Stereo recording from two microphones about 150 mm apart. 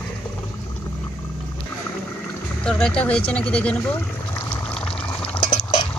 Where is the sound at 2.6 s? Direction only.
5° left (ahead or behind).